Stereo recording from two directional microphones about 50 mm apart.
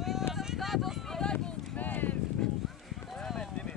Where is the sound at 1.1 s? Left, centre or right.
Centre.